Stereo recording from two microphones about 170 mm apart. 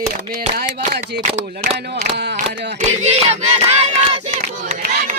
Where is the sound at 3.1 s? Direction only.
35° right (ahead or behind).